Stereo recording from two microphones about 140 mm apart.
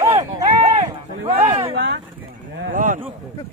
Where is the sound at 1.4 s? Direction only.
45° right (ahead or behind).